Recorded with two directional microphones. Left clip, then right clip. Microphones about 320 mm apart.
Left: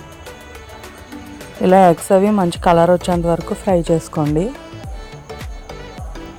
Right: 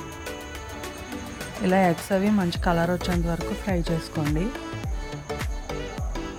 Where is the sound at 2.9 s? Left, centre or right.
Centre.